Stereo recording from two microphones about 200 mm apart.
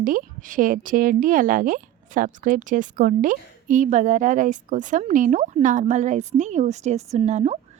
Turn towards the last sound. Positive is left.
turn(degrees=-35)  # may be behind; listen again after turning